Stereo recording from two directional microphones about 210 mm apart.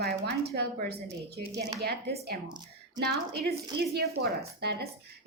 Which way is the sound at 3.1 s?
50° right (ahead or behind).